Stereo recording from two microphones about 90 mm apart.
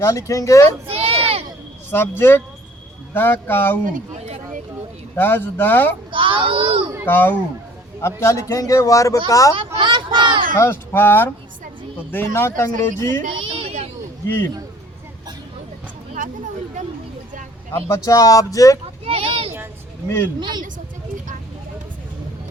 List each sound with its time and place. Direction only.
0.0 s a man's voice: 35° left (ahead or behind)
0.9 s a sound: 90° right
1.9 s speech: 25° left (ahead or behind)
5.1 s speech: 20° left (ahead or behind)
6.1 s a child's voice: 75° right (ahead or behind)
7.0 s a man's voice: 20° left (ahead or behind); by 9.6 s 40° left (ahead or behind)
9.7 s a sound: 65° right (ahead or behind)
10.6 s a man's voice: 25° left (ahead or behind)
13.2 s a sound: 75° right (ahead or behind)
14.3 s speech: 25° left (ahead or behind)
17.7 s a man's voice: 35° left (ahead or behind)
19.0 s children playing: 90° right
20.1 s speech: 25° left (ahead or behind)
20.4 s speech: 55° right (ahead or behind)